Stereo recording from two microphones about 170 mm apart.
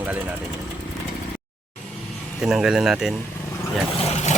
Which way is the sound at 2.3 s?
5° right (ahead or behind).